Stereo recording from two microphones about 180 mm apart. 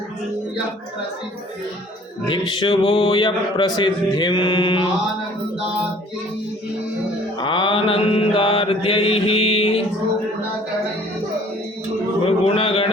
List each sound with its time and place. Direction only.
2.5 s speech: 30° left (ahead or behind)
7.3 s mantra: 25° left (ahead or behind)
12.5 s speech: 35° left (ahead or behind)